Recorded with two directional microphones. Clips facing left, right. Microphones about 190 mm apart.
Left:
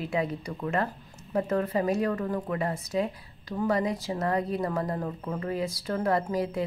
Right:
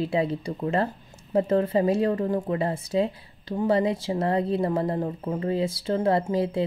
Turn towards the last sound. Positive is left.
turn(degrees=-30)  # may be behind; listen again after turning